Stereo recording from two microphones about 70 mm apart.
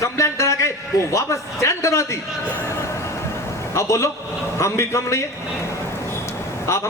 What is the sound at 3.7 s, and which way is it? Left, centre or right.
A man's voice, left.